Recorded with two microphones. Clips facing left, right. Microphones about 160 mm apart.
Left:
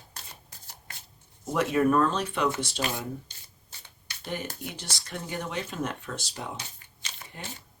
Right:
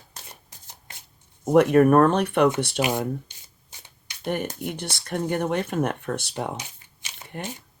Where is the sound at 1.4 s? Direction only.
60° right (ahead or behind).